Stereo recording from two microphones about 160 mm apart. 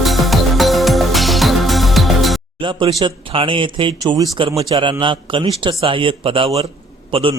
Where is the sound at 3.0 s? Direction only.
30° right (ahead or behind).